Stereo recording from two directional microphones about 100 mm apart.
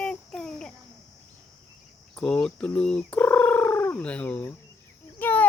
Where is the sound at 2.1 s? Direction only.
10° left (ahead or behind).